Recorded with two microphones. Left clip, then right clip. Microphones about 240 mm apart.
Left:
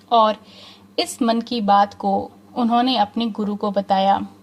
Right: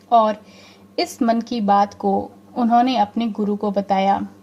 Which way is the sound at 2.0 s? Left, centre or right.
Left.